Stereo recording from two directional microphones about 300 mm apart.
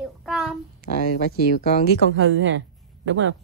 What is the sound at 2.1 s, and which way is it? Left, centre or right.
A woman's voice, right.